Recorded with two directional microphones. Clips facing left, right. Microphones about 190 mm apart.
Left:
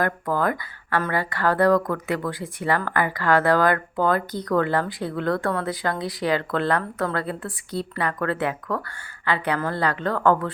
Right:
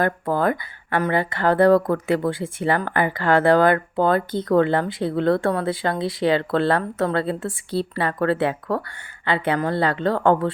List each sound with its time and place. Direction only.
0.0 s speech: 30° right (ahead or behind)